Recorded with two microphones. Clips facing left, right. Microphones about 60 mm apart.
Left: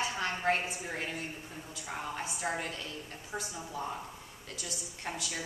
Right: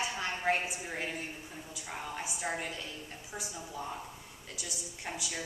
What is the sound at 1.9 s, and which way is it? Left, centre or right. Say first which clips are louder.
Speech: left 2 dB; centre.